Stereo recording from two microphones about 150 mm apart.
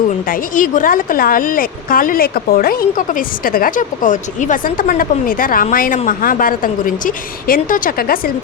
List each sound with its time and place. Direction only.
0.3 s speech: 60° left (ahead or behind)